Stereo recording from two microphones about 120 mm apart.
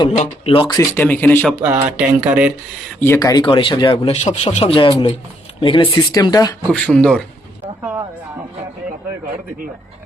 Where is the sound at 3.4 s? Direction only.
45° left (ahead or behind).